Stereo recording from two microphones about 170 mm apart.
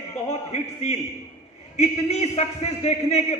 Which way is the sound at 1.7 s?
40° left (ahead or behind).